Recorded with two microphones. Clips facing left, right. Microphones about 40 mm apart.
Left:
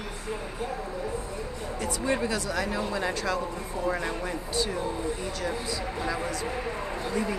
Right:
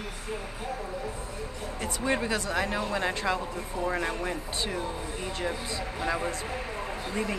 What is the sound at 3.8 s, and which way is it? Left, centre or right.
Speech, centre.